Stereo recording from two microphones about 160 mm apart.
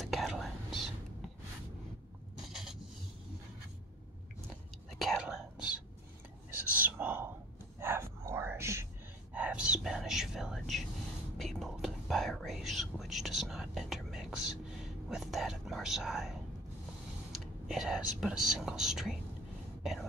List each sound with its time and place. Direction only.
0.0 s whispering: centre (ahead or behind)
2.4 s rub: 5° right (ahead or behind)
4.9 s whispering: centre (ahead or behind)
17.3 s a sound: 5° right (ahead or behind)
18.2 s whispering: 5° right (ahead or behind)
19.8 s a sound: centre (ahead or behind)